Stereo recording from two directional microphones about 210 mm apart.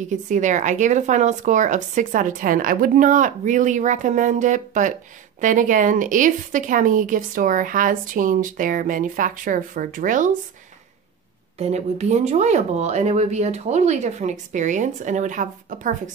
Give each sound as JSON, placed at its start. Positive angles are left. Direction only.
{"t": 0.0, "sound": "speech", "side_deg": -35}
{"t": 11.5, "sound": "speech", "side_deg": -30}